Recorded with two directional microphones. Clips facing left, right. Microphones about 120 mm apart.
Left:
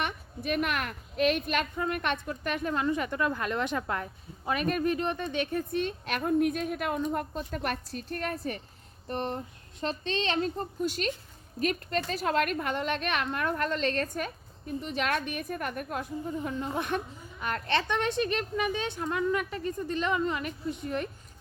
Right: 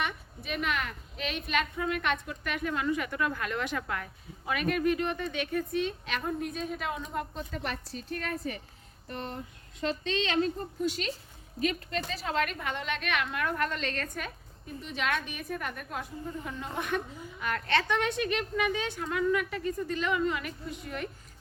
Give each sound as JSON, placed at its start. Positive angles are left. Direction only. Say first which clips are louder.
{"t": 0.0, "sound": "a woman's voice", "louder": "left 2 dB", "side_deg": 50}
{"t": 9.8, "sound": "a woman's voice", "louder": "even", "side_deg": 30}
{"t": 14.8, "sound": "a woman's voice", "louder": "left 1 dB", "side_deg": 50}
{"t": 17.4, "sound": "a woman's voice", "louder": "even", "side_deg": 25}
{"t": 18.8, "sound": "a woman's voice", "louder": "left 1 dB", "side_deg": 20}